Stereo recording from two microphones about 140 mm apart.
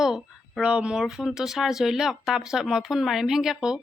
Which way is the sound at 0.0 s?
5° right (ahead or behind).